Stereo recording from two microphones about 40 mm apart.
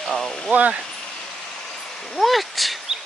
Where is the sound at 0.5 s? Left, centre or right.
Right.